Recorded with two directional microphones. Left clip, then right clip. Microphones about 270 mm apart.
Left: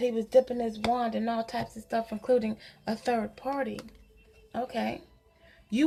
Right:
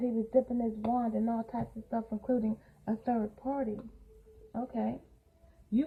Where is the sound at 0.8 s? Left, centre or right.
Left.